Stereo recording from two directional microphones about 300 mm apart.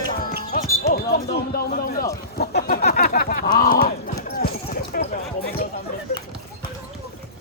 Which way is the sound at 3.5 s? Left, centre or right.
Left.